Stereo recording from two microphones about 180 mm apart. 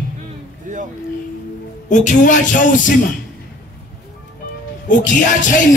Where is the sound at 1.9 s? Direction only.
45° left (ahead or behind).